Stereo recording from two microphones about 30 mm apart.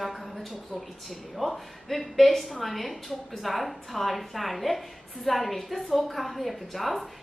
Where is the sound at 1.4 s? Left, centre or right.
Centre.